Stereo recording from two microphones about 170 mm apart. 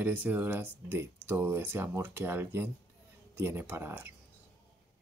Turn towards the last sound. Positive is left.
turn(degrees=-10)  # may be behind; listen again after turning